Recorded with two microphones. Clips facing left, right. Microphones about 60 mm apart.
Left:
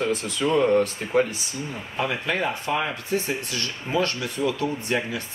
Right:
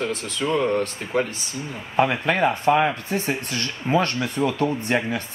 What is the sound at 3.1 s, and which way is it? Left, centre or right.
Speech, right.